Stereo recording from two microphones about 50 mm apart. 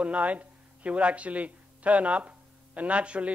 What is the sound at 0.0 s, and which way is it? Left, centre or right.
Speech, right.